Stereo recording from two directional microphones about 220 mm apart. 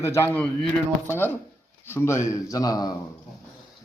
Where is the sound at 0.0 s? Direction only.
10° left (ahead or behind).